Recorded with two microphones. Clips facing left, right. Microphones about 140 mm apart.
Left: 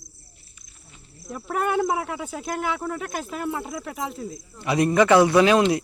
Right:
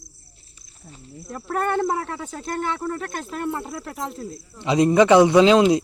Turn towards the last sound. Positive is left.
turn(degrees=-20)  # may be behind; listen again after turning